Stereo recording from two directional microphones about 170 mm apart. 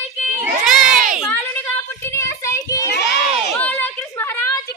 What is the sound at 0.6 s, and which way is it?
Crowd, 55° right (ahead or behind).